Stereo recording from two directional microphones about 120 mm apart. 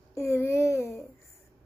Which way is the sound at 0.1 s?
25° left (ahead or behind).